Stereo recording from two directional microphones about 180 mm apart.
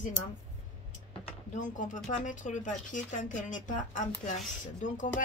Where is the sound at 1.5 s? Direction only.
45° left (ahead or behind).